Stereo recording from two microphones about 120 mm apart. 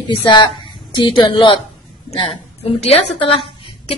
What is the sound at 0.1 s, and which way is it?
A woman's voice, 40° left (ahead or behind).